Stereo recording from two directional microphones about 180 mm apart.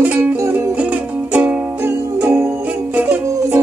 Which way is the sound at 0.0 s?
10° right (ahead or behind).